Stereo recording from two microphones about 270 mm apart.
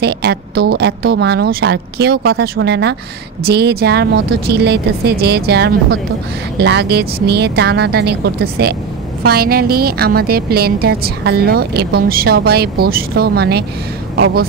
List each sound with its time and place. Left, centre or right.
0.0 s a woman's voice: right